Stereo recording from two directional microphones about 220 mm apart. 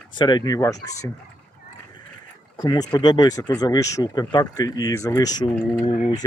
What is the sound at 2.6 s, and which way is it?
Speech, 15° left (ahead or behind).